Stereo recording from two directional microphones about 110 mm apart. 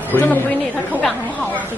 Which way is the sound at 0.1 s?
15° left (ahead or behind).